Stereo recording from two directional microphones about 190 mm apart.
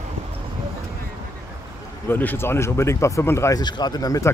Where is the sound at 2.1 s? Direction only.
10° left (ahead or behind).